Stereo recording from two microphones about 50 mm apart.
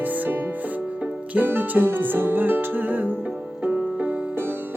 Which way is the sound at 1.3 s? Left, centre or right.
Right.